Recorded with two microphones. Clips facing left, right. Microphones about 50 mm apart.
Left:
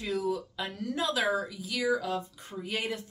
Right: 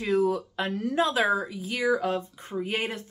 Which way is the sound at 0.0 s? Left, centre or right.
Right.